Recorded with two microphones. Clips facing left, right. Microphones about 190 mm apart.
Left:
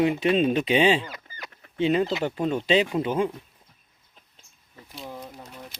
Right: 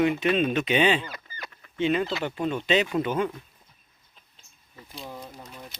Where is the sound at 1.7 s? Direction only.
35° left (ahead or behind).